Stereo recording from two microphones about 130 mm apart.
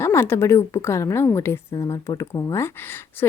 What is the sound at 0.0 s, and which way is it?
Speech, 20° left (ahead or behind).